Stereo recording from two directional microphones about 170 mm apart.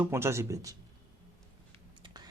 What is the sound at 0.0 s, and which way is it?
Speech, 15° right (ahead or behind).